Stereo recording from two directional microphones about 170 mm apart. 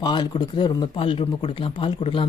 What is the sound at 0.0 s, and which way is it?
Speech, 25° left (ahead or behind).